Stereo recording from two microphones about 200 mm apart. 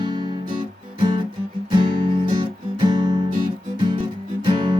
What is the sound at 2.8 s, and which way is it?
Music, 25° right (ahead or behind).